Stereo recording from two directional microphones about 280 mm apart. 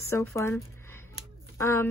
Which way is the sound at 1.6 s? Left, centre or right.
Centre.